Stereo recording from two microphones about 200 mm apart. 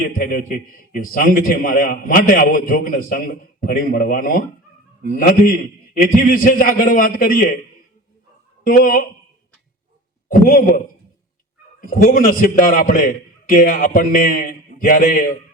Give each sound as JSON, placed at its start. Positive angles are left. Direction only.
{"t": 0.0, "sound": "a man's voice", "side_deg": 45}
{"t": 8.6, "sound": "a man's voice", "side_deg": 45}
{"t": 10.2, "sound": "a man's voice", "side_deg": 40}